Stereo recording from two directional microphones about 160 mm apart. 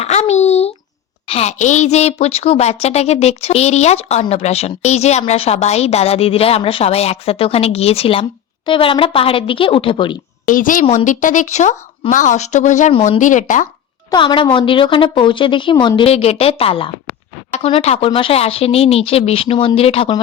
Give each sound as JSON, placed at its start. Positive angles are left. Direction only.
{"t": 0.0, "sound": "a sound", "side_deg": 45}
{"t": 1.3, "sound": "a woman's voice", "side_deg": 40}
{"t": 10.4, "sound": "a woman's voice", "side_deg": 55}
{"t": 14.1, "sound": "a woman's voice", "side_deg": 30}